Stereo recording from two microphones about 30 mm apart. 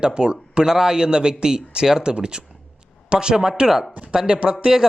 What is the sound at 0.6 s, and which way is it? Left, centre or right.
A man's voice, centre.